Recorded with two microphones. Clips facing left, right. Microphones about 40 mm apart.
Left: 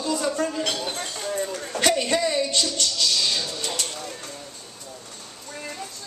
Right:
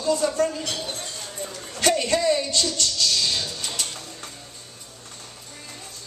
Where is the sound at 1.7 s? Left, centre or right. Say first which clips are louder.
Right 1 dB; left.